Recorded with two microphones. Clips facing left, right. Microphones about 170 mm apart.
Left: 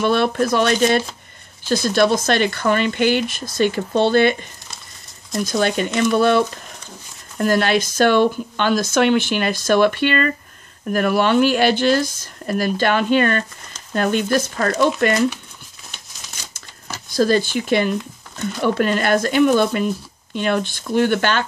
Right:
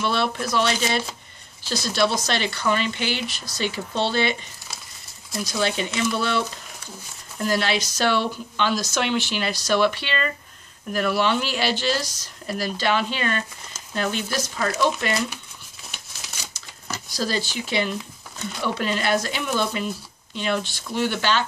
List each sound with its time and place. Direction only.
0.0 s speech: 50° left (ahead or behind)
5.4 s speech: 50° left (ahead or behind)
17.1 s speech: 50° left (ahead or behind)